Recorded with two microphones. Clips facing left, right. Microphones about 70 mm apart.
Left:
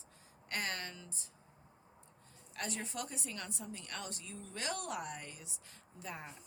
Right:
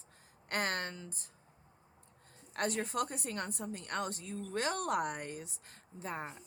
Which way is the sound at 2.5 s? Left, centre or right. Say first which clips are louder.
Right 7 dB; right.